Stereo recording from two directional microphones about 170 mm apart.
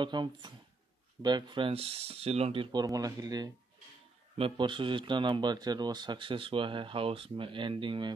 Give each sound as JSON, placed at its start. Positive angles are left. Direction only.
{"t": 0.0, "sound": "speech", "side_deg": -25}